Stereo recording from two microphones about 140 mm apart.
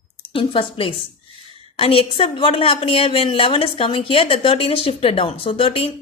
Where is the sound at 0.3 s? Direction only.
40° left (ahead or behind).